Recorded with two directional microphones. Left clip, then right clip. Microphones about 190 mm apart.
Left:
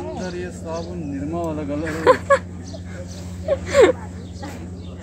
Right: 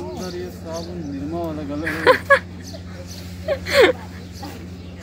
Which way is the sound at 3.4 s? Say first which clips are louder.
Left 1 dB; 5° left (ahead or behind).